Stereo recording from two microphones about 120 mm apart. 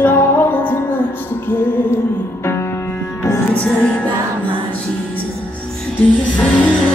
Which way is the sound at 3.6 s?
10° left (ahead or behind).